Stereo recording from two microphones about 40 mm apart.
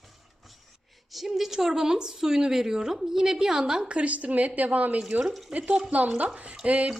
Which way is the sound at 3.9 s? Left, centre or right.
Right.